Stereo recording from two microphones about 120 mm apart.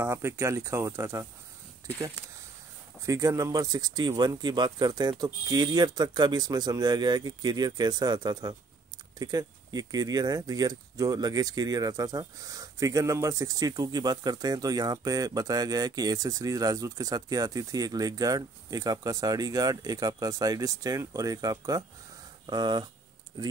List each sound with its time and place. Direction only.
0.0 s speech: 20° right (ahead or behind)
3.1 s speech: 25° right (ahead or behind)